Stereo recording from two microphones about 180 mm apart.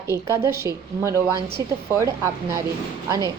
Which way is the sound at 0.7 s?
20° right (ahead or behind).